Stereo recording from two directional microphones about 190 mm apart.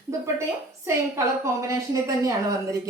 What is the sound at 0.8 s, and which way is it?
A woman's voice, 15° right (ahead or behind).